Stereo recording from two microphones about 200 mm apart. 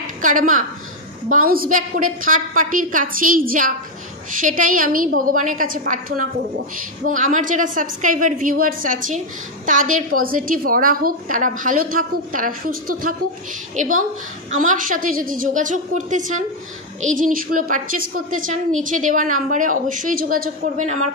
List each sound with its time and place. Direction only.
0.0 s a woman's voice: 40° right (ahead or behind)